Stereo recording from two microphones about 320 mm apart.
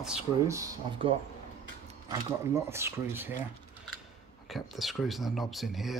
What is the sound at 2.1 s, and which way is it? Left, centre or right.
Speech, centre.